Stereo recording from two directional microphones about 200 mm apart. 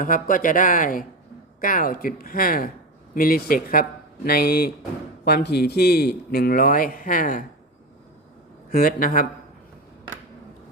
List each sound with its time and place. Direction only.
0.0 s a man's voice: 40° left (ahead or behind)
8.7 s a man's voice: 45° left (ahead or behind)